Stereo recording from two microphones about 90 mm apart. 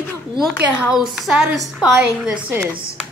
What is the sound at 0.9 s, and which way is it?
A woman's voice, 5° right (ahead or behind).